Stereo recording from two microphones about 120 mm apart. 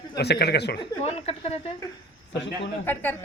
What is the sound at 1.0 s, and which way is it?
Speech, 60° left (ahead or behind).